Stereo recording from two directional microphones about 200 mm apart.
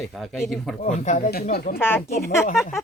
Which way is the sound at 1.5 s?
50° left (ahead or behind).